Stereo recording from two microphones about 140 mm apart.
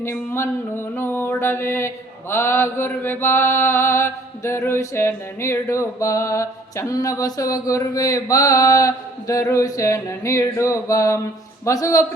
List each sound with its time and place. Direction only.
0.0 s mantra: 20° left (ahead or behind)